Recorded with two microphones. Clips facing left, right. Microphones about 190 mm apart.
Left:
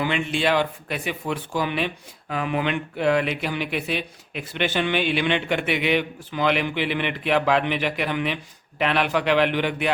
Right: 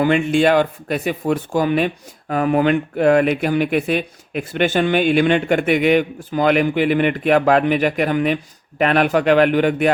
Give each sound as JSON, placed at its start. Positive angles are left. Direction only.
{"t": 0.0, "sound": "speech", "side_deg": -45}